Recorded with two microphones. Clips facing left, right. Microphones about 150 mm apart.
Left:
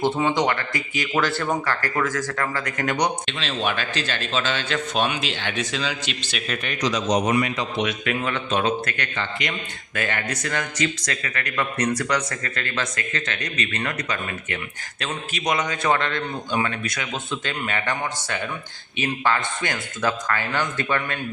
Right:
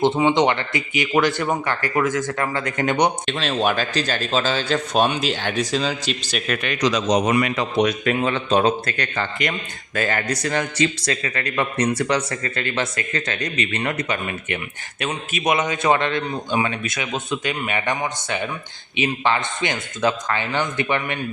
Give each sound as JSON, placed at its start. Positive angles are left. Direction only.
{"t": 0.2, "sound": "speech", "side_deg": -20}
{"t": 3.2, "sound": "speech", "side_deg": -45}
{"t": 6.5, "sound": "a man's voice", "side_deg": -80}
{"t": 7.8, "sound": "speech", "side_deg": -40}
{"t": 8.1, "sound": "speech", "side_deg": -30}